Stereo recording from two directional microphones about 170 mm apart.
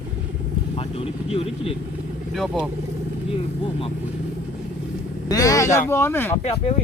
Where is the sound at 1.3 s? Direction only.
35° left (ahead or behind).